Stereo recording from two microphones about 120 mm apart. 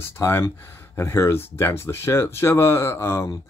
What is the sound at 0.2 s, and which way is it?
Speech, 20° left (ahead or behind).